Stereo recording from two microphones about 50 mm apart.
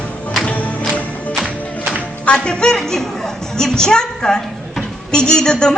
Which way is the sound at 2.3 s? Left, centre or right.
Centre.